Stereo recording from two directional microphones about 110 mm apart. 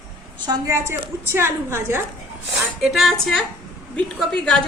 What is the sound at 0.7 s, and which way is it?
A woman's voice, 25° right (ahead or behind).